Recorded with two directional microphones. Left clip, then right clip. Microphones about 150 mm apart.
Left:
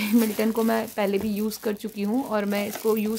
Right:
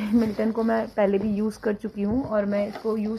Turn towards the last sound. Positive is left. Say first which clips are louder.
# left 3 dB
turn(degrees=90)